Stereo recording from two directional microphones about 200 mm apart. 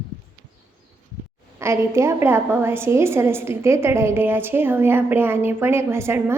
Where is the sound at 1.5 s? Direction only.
15° right (ahead or behind).